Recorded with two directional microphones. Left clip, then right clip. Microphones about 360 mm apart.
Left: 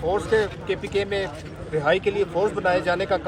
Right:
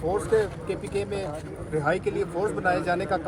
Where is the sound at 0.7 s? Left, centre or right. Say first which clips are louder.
Left 5 dB; left.